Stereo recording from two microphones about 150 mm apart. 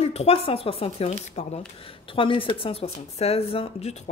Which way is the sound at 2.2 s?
35° left (ahead or behind).